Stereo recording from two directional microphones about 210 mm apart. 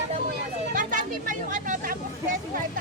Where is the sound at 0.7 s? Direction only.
40° right (ahead or behind).